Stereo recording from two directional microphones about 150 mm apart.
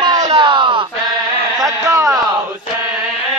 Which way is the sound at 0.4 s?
35° right (ahead or behind).